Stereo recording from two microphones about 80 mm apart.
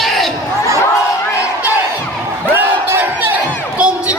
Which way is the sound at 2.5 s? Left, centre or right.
Right.